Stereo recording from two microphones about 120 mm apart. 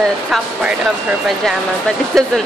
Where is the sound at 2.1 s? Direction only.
Centre (ahead or behind).